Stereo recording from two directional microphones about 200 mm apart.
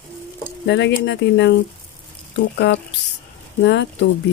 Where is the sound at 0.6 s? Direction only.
60° left (ahead or behind).